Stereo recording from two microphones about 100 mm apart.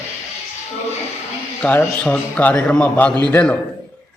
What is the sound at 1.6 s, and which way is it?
A man's voice, 15° left (ahead or behind).